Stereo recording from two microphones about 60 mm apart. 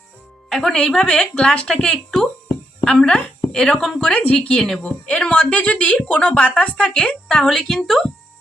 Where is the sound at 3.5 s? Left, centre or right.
Centre.